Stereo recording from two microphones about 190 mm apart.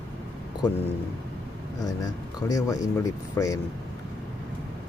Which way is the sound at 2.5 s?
20° left (ahead or behind).